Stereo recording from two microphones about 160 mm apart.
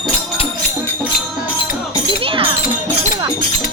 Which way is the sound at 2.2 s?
35° right (ahead or behind).